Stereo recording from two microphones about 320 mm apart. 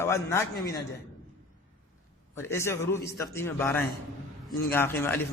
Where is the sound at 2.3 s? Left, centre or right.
Centre.